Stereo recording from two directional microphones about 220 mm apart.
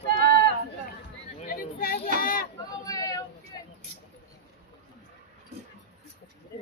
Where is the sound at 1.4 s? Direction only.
40° left (ahead or behind).